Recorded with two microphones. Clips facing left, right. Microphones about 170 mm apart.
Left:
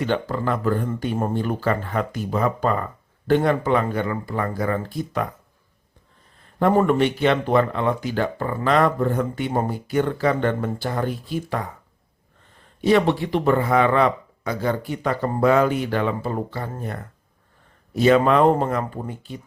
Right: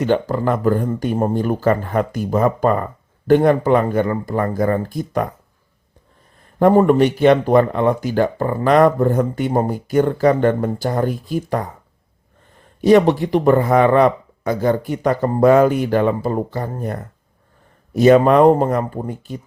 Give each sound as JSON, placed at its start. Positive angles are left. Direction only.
{"t": 0.0, "sound": "speech", "side_deg": -40}
{"t": 6.6, "sound": "speech", "side_deg": -40}
{"t": 12.8, "sound": "speech", "side_deg": -45}